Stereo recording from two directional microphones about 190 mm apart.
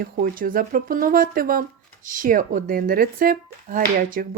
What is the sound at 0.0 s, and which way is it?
Speech, 50° right (ahead or behind).